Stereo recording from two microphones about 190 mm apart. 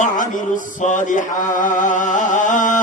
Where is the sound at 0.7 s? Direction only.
40° left (ahead or behind).